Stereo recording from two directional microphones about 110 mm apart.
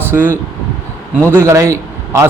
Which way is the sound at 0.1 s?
20° right (ahead or behind).